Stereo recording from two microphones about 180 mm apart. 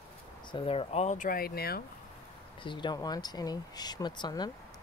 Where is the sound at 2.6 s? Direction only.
25° left (ahead or behind).